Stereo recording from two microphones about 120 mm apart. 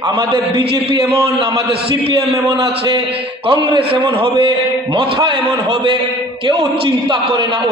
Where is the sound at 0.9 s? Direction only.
25° right (ahead or behind).